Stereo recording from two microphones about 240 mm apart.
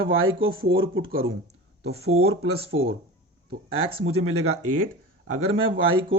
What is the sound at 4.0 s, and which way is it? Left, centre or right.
Speech, right.